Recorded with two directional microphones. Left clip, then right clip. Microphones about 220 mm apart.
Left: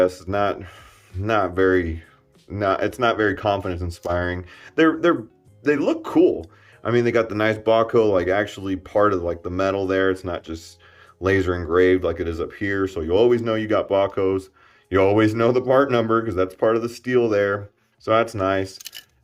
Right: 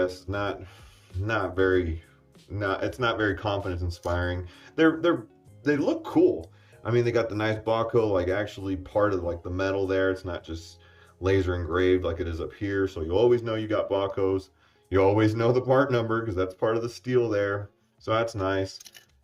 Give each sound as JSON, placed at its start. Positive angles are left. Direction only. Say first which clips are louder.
{"t": 0.0, "sound": "speech", "louder": "left 9 dB", "side_deg": 15}